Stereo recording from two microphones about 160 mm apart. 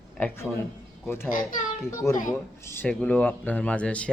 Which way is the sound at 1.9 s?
20° left (ahead or behind).